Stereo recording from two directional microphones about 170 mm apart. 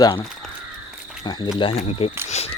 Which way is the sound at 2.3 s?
40° left (ahead or behind).